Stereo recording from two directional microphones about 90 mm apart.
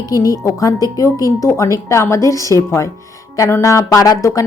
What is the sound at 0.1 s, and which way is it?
Speech, 40° left (ahead or behind).